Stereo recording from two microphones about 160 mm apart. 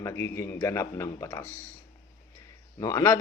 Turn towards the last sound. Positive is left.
turn(degrees=15)  # may be behind; listen again after turning